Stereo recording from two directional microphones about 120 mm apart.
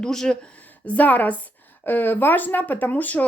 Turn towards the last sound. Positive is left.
turn(degrees=15)  # may be behind; listen again after turning